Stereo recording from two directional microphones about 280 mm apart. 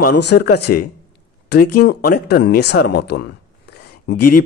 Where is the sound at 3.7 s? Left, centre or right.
Left.